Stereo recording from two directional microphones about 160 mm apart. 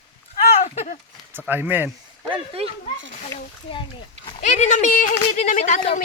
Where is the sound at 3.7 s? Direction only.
35° left (ahead or behind).